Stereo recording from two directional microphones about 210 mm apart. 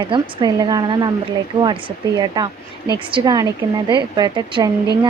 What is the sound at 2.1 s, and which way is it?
A woman's voice, 20° right (ahead or behind).